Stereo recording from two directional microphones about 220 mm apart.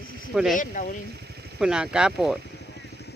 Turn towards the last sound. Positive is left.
turn(degrees=50)  # may be behind; listen again after turning